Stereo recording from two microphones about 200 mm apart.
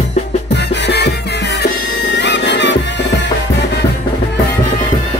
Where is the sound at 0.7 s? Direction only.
60° left (ahead or behind).